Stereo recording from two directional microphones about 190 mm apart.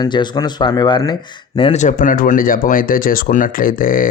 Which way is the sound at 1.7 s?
40° left (ahead or behind).